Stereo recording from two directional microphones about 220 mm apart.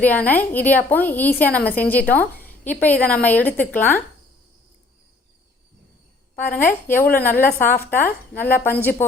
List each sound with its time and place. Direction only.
0.0 s a woman's voice: 5° left (ahead or behind)
6.3 s a woman's voice: 10° left (ahead or behind)